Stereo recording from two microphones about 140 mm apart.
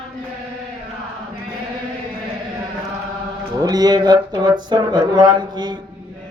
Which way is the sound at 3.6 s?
25° right (ahead or behind).